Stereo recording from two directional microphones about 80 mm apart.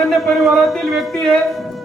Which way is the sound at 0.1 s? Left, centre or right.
Centre.